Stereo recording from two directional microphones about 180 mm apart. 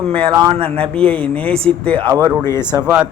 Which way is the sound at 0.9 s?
5° left (ahead or behind).